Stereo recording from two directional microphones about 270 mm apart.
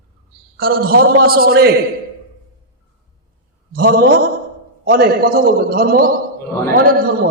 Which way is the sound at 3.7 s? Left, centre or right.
Right.